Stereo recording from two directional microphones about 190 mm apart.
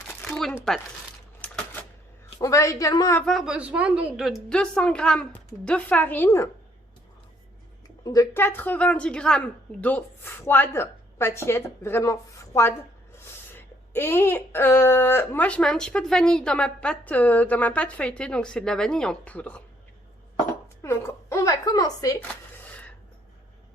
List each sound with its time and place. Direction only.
0.3 s a sound: 5° left (ahead or behind)
1.4 s typewriter: 10° left (ahead or behind)
2.4 s speech: 15° left (ahead or behind)
3.2 s a woman's voice: centre (ahead or behind)
8.0 s speech: 20° left (ahead or behind)
20.8 s a sound: 15° left (ahead or behind)